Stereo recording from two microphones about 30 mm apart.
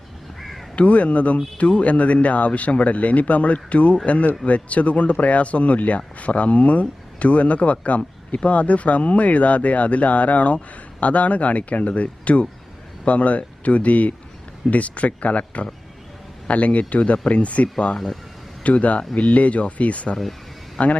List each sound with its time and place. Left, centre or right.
0.3 s crow: centre
0.8 s speech: left
17.9 s speech: centre
18.6 s speech: left